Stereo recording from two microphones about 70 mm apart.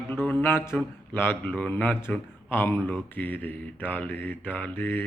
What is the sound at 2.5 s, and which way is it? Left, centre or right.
Speech, left.